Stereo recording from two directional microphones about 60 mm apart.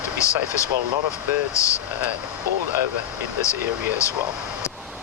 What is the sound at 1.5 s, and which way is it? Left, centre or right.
Speech, left.